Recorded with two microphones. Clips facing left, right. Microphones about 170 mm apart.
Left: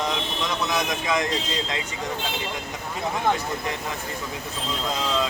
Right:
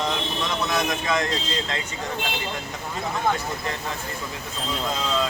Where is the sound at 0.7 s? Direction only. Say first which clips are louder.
Right 1 dB; 15° left (ahead or behind).